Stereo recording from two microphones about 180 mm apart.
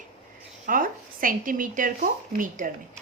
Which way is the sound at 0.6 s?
50° right (ahead or behind).